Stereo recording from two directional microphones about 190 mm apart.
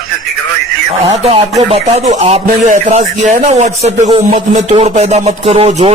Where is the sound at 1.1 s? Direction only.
30° right (ahead or behind).